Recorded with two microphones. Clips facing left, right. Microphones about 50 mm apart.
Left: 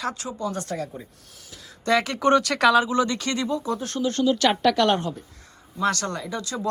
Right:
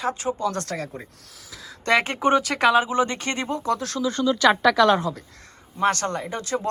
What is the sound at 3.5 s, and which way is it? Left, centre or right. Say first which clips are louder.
Speech: right 5 dB; right.